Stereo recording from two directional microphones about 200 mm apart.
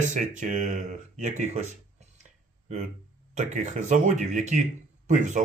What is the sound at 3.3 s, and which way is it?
Speech, 40° right (ahead or behind).